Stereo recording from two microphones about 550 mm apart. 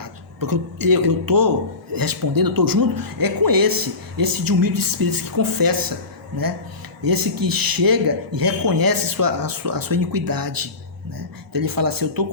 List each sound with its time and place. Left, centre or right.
0.0 s speech: right
7.0 s speech: right